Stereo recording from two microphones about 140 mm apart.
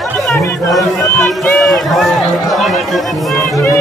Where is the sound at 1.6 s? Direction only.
Centre (ahead or behind).